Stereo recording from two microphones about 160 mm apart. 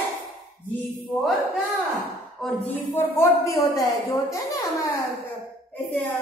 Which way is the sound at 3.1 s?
20° left (ahead or behind).